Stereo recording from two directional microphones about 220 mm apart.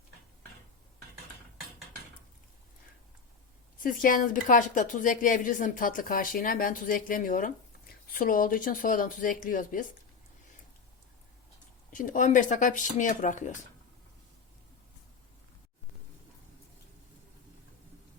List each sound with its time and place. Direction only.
3.8 s a woman's voice: 40° left (ahead or behind)
11.9 s a woman's voice: 35° left (ahead or behind)